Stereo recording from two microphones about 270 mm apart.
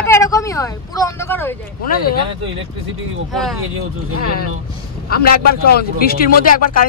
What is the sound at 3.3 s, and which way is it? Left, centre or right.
Speech, centre.